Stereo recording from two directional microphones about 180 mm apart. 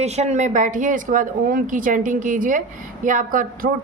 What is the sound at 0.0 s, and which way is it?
A woman's voice, 35° right (ahead or behind).